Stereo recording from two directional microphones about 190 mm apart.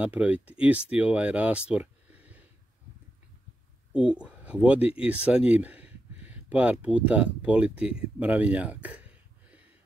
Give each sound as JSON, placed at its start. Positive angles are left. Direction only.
{"t": 0.0, "sound": "speech", "side_deg": -5}
{"t": 3.9, "sound": "speech", "side_deg": -5}